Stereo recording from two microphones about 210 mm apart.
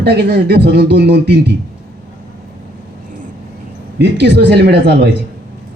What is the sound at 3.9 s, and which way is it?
Speech, 55° right (ahead or behind).